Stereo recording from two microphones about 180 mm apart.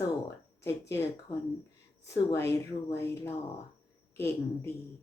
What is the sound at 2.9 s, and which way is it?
Speech, 15° left (ahead or behind).